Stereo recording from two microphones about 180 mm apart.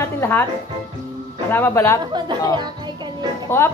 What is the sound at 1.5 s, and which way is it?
Speech, 15° left (ahead or behind).